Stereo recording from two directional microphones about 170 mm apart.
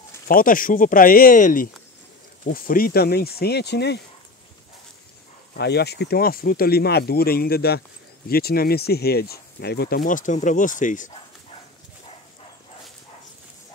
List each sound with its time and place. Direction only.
0.3 s speech: 55° left (ahead or behind); by 4.0 s 75° left (ahead or behind)
5.6 s speech: 75° left (ahead or behind); by 11.1 s 50° left (ahead or behind)